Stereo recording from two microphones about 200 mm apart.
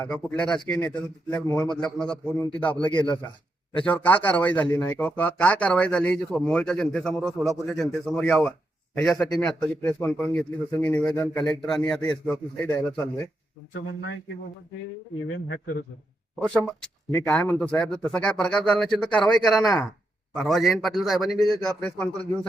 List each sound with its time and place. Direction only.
0.0 s a man's voice: 5° left (ahead or behind)
13.7 s speech: 60° left (ahead or behind)
16.4 s a man's voice: 5° left (ahead or behind)